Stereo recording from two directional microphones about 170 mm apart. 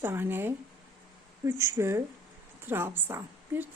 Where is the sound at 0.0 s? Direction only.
15° right (ahead or behind).